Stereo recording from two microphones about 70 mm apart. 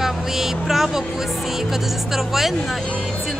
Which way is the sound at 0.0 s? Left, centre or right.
Centre.